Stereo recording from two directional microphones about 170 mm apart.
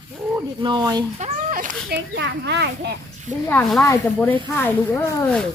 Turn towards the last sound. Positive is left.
turn(degrees=10)  # may be behind; listen again after turning